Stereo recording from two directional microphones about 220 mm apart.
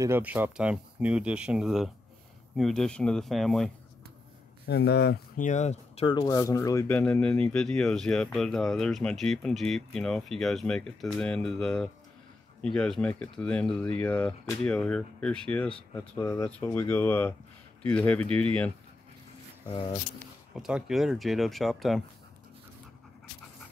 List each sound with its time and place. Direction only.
0.0 s speech: 10° right (ahead or behind)
4.6 s speech: 50° left (ahead or behind)
5.5 s speech: 30° left (ahead or behind); by 18.2 s 5° left (ahead or behind)
20.5 s speech: centre (ahead or behind)